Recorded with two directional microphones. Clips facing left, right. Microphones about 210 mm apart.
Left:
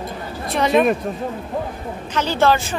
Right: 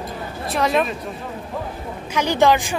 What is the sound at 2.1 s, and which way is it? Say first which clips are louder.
Speech: right 1 dB; 15° right (ahead or behind).